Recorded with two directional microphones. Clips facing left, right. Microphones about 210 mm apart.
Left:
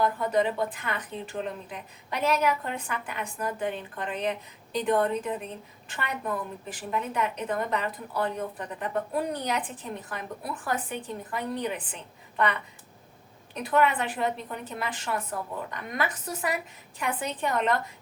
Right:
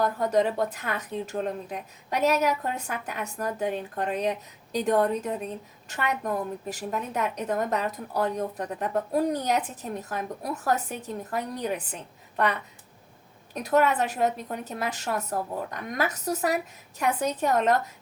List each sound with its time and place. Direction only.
0.0 s a woman's voice: 40° right (ahead or behind)
13.5 s a woman's voice: 40° right (ahead or behind)